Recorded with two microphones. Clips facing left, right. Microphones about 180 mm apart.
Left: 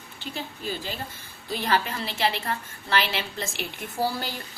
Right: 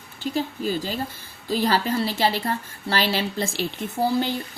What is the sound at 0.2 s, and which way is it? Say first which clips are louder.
A woman's voice: right 10 dB; 40° right (ahead or behind).